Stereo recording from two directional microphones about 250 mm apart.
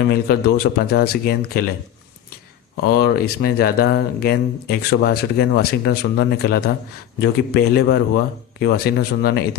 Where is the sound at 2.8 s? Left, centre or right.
Left.